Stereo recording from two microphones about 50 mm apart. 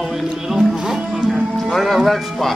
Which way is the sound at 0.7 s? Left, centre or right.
Centre.